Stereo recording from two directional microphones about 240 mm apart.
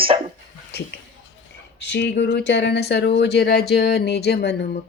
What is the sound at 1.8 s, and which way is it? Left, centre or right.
Speech, left.